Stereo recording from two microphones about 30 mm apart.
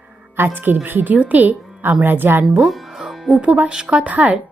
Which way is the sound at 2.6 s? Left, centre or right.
Centre.